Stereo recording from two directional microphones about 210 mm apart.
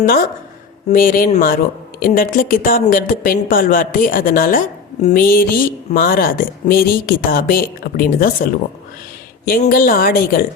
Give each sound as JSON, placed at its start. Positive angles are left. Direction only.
{"t": 0.9, "sound": "a woman's voice", "side_deg": 40}
{"t": 9.5, "sound": "a woman's voice", "side_deg": 40}